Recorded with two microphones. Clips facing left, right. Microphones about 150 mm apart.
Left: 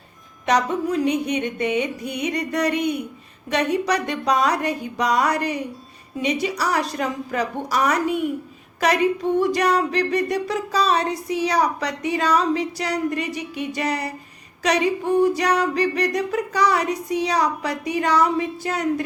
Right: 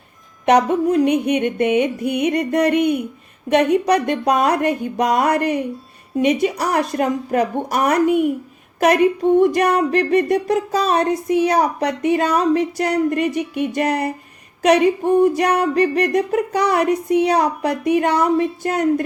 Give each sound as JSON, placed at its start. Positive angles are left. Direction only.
{"t": 0.4, "sound": "music", "side_deg": -55}